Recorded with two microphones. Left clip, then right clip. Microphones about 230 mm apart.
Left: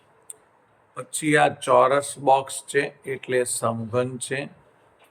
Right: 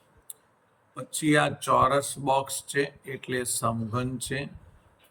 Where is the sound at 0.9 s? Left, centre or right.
Centre.